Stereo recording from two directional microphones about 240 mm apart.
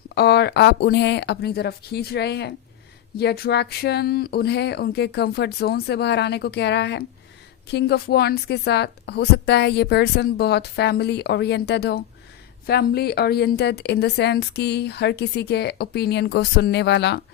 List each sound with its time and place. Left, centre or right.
0.1 s a woman's voice: left